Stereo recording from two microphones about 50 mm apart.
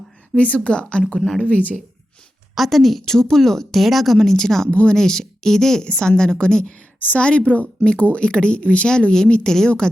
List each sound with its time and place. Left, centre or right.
0.3 s speech: left
2.6 s a woman's voice: centre
4.7 s speech: left
4.9 s a woman's voice: centre